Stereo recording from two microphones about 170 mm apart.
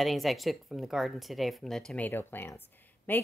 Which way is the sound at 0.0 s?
Centre (ahead or behind).